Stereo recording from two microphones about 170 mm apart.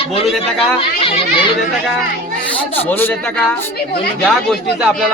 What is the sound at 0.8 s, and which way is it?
Speech, 35° left (ahead or behind).